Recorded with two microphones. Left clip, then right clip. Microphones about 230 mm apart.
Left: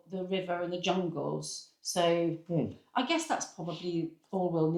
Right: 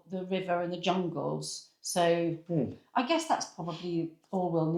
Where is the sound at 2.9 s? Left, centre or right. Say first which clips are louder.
Right 2 dB; right.